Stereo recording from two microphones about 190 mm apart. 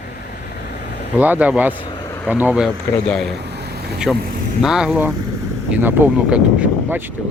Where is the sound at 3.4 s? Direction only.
60° right (ahead or behind).